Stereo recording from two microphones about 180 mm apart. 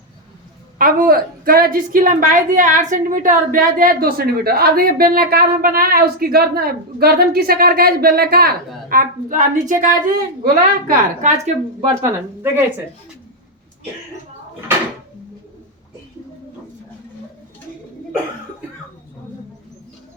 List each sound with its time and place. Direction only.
0.8 s a woman's voice: 50° right (ahead or behind)
12.0 s speech: 10° right (ahead or behind)